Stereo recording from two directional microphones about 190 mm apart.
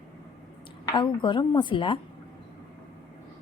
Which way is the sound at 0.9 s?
25° left (ahead or behind).